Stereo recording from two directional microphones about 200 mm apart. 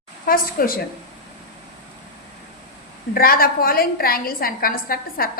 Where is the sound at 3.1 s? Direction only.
45° left (ahead or behind).